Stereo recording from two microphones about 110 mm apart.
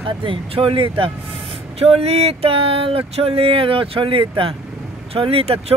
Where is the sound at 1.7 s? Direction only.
65° right (ahead or behind).